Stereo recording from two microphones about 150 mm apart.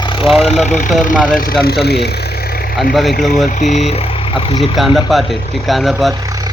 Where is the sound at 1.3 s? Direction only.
90° left.